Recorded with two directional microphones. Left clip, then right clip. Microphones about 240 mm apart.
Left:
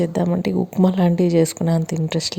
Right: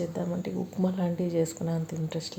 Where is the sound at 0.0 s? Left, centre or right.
Left.